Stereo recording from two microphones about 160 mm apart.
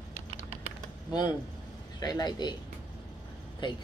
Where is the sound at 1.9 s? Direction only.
25° left (ahead or behind).